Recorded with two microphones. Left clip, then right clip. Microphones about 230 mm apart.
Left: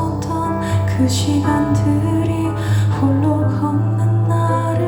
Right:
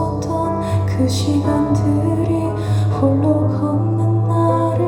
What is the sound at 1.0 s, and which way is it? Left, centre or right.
Music, centre.